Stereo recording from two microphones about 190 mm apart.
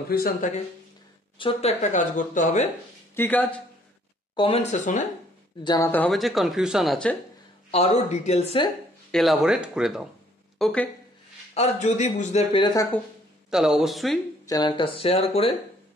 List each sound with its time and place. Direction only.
0.1 s speech: 50° left (ahead or behind)
1.4 s speech: 35° left (ahead or behind)
3.2 s a man's voice: 10° left (ahead or behind)
4.4 s speech: 30° left (ahead or behind)
5.6 s speech: 20° left (ahead or behind)
5.9 s speech: 5° left (ahead or behind)
7.7 s speech: 35° left (ahead or behind)
9.1 s speech: centre (ahead or behind)
11.5 s speech: 35° left (ahead or behind)
13.5 s speech: 5° right (ahead or behind)
14.4 s speech: 20° left (ahead or behind)